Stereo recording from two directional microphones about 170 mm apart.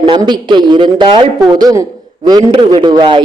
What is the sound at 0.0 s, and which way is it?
A man's voice, 25° right (ahead or behind).